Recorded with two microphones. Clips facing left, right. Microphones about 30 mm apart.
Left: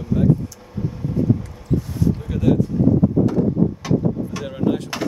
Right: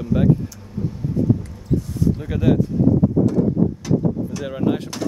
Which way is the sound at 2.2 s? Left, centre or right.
Centre.